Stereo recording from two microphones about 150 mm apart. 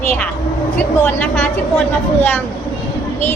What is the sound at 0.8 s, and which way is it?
Speech, 10° left (ahead or behind).